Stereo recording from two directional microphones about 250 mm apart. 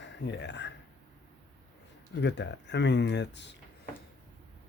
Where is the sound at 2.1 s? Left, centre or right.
Left.